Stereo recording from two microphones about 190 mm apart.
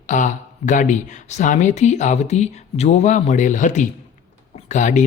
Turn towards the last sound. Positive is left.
turn(degrees=40)  # may be behind; listen again after turning